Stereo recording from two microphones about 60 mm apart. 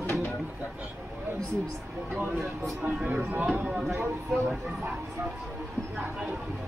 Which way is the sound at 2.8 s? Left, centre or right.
Right.